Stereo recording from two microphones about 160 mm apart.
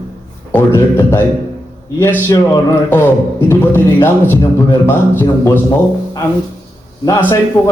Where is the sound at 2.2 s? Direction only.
15° left (ahead or behind).